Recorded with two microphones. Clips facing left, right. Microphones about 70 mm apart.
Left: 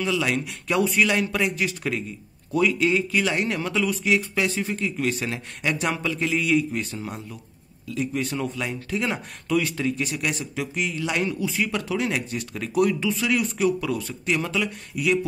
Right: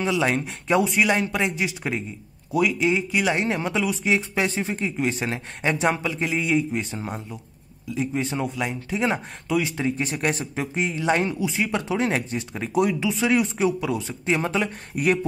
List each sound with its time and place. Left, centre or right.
0.0 s speech: right
11.3 s speech: centre
14.9 s speech: right